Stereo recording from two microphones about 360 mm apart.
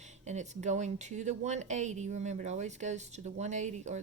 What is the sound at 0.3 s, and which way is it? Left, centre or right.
Speech, centre.